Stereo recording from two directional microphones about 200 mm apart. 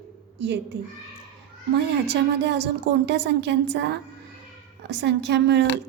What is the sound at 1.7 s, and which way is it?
A woman's voice, 60° right (ahead or behind).